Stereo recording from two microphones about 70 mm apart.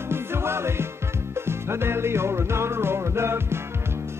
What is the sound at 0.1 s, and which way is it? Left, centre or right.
Music, right.